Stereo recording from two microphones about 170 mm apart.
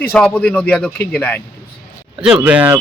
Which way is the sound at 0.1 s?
5° left (ahead or behind).